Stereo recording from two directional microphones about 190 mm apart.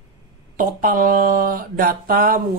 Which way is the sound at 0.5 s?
45° right (ahead or behind).